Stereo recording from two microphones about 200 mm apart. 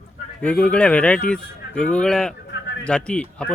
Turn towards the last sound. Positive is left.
turn(degrees=5)  # may be behind; listen again after turning